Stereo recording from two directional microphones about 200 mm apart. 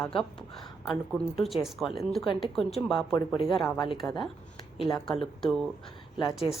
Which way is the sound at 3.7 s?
20° left (ahead or behind).